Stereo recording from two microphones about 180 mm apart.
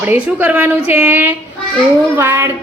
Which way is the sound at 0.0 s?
10° right (ahead or behind).